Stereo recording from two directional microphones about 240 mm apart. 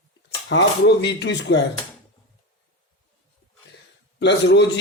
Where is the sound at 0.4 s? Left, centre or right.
Left.